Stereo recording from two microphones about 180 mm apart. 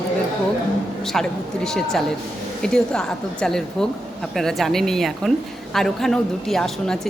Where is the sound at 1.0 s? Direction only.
5° left (ahead or behind).